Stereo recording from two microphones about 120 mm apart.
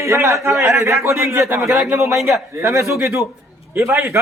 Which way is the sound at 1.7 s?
5° right (ahead or behind).